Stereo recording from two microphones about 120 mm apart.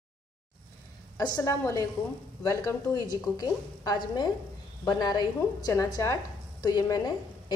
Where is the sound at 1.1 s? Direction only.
30° left (ahead or behind).